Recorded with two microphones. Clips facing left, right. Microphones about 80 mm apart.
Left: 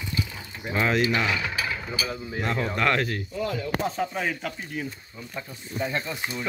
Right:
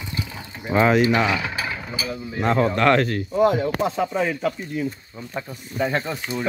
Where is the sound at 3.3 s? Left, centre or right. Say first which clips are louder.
Right 12 dB; right.